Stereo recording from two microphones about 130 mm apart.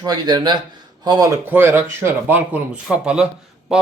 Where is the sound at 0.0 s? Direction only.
30° right (ahead or behind).